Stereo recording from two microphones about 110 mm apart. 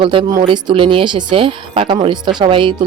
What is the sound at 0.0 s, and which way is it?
A woman's voice, 50° right (ahead or behind).